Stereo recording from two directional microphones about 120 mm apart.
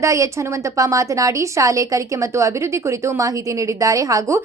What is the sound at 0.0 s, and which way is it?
A woman's voice, 25° right (ahead or behind).